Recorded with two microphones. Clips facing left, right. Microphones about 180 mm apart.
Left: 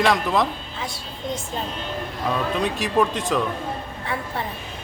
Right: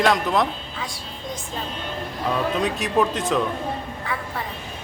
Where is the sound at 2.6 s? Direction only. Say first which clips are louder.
Left 2 dB; centre (ahead or behind).